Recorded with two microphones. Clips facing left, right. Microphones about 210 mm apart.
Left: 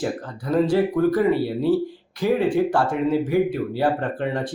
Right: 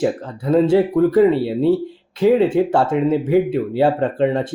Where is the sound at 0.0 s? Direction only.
25° right (ahead or behind).